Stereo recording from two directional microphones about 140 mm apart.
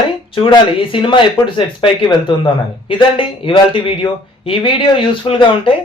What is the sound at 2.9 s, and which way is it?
Speech, 40° left (ahead or behind).